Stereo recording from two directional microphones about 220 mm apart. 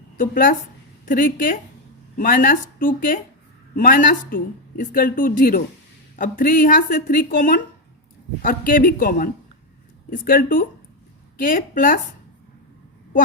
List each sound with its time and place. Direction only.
0.2 s speech: 40° left (ahead or behind)